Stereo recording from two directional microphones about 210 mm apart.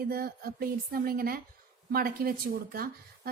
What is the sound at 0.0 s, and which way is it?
A woman's voice, 45° right (ahead or behind).